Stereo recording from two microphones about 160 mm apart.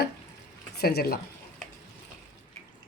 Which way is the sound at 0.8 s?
75° left (ahead or behind).